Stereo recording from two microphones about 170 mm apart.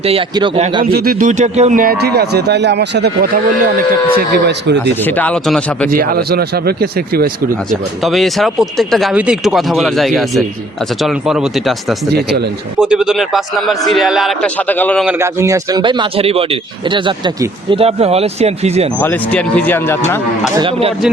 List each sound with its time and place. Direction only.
0.0 s speech: 35° right (ahead or behind)
0.9 s a man's voice: 60° right (ahead or behind)
5.0 s speech: 10° left (ahead or behind)
5.9 s a man's voice: 60° right (ahead or behind)
7.7 s speech: centre (ahead or behind)
15.2 s speech: 15° right (ahead or behind); by 18.9 s 40° right (ahead or behind)
18.9 s speech: 10° left (ahead or behind)
20.6 s speech: 35° right (ahead or behind)